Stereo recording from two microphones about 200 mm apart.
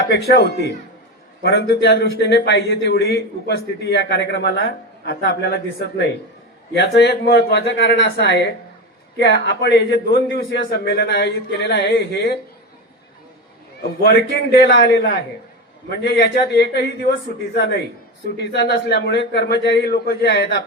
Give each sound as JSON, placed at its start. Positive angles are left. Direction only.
{"t": 0.1, "sound": "a man's voice", "side_deg": 55}
{"t": 14.0, "sound": "a man's voice", "side_deg": 50}